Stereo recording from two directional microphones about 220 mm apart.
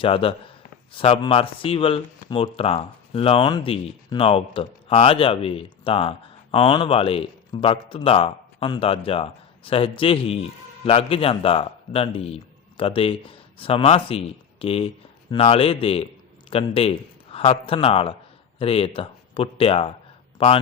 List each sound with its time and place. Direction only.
0.0 s a man's voice: 25° left (ahead or behind)